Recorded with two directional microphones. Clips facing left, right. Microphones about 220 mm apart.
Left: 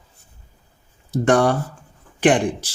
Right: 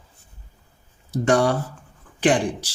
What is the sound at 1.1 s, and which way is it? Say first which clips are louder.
Speech: left 2 dB; 50° left (ahead or behind).